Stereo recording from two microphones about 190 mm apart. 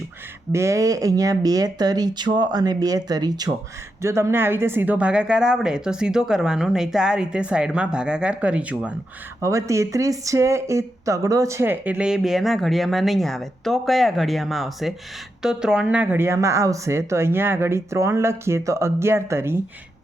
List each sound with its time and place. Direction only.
0.5 s speech: 15° right (ahead or behind)